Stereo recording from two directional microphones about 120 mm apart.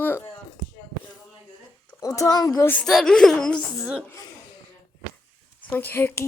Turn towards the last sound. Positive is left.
turn(degrees=20)  # may be behind; listen again after turning